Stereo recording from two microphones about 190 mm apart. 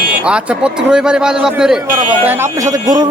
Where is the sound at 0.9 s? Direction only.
5° right (ahead or behind).